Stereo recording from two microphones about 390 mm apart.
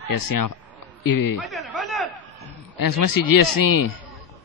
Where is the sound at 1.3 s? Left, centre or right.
Centre.